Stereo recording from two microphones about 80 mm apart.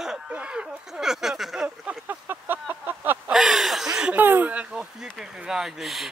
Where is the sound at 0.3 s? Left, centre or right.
Centre.